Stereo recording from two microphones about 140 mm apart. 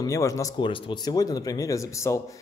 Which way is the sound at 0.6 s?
35° left (ahead or behind).